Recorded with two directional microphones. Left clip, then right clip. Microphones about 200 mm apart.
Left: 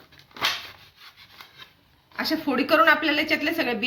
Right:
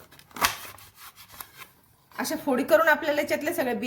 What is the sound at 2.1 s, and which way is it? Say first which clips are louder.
A woman's voice: left 2 dB; 45° right (ahead or behind).